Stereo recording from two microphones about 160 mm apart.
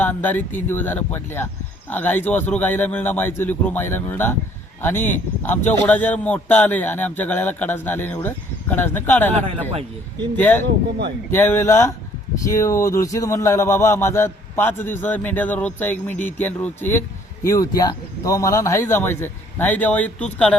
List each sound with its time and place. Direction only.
0.0 s speech: 10° left (ahead or behind)
9.5 s a man's voice: 35° right (ahead or behind)
10.3 s speech: 10° left (ahead or behind)